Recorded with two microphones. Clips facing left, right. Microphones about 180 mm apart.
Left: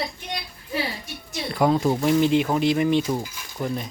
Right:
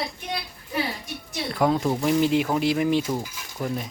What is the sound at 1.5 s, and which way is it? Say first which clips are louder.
Speech: left 2 dB; centre (ahead or behind).